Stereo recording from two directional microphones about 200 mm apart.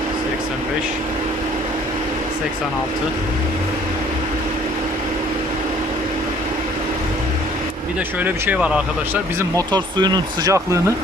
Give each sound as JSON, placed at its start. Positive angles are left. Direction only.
{"t": 8.2, "sound": "speech", "side_deg": -5}
{"t": 9.6, "sound": "speech", "side_deg": -20}